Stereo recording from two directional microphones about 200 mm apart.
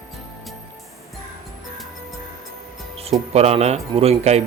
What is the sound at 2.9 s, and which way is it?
Speech, 30° right (ahead or behind).